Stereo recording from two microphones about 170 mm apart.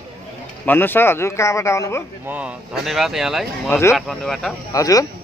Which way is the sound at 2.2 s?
10° right (ahead or behind).